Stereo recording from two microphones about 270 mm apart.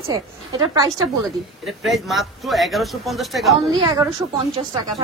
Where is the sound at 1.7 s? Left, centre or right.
Centre.